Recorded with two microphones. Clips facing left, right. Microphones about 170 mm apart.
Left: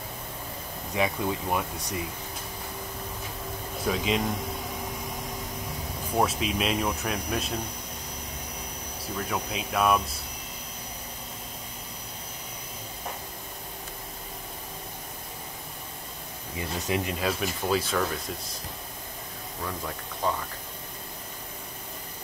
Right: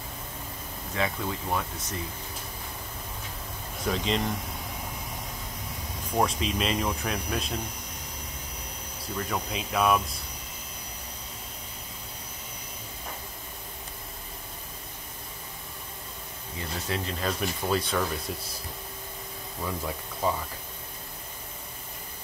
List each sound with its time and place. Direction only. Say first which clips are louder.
0.9 s speech: left 3 dB; 15° left (ahead or behind)
3.8 s speech: left 1 dB; 5° left (ahead or behind)
6.1 s speech: left 1 dB; 5° left (ahead or behind)
9.1 s speech: even; centre (ahead or behind)
16.5 s speech: left 3 dB; 15° left (ahead or behind)
17.2 s speech: left 1 dB; 5° left (ahead or behind)
19.6 s speech: right 2 dB; 10° right (ahead or behind)